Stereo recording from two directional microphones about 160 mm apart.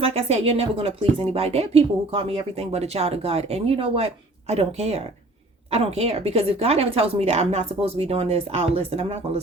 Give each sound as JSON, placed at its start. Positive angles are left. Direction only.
{"t": 0.0, "sound": "a woman's voice", "side_deg": -40}